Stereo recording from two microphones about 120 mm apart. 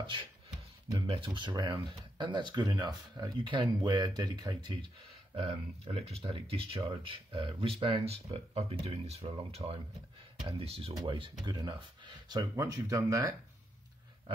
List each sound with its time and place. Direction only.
0.0 s speech: 45° right (ahead or behind)
5.3 s speech: 55° right (ahead or behind)
11.1 s speech: 45° right (ahead or behind); by 13.3 s 30° right (ahead or behind)